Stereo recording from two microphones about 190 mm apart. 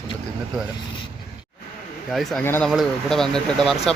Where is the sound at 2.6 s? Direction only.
Centre (ahead or behind).